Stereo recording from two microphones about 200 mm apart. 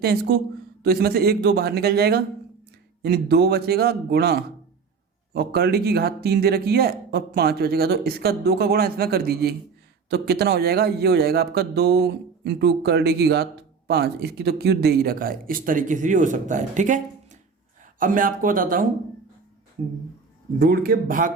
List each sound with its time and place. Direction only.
0.0 s speech: 50° right (ahead or behind)
18.0 s speech: 45° right (ahead or behind)
20.6 s speech: 50° right (ahead or behind)